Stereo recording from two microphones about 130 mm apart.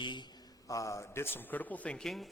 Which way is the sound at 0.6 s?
25° left (ahead or behind).